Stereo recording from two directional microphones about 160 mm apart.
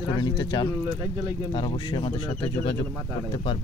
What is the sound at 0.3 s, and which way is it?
Speech, 25° left (ahead or behind).